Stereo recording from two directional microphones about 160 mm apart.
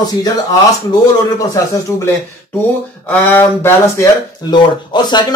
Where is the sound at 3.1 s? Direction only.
10° left (ahead or behind).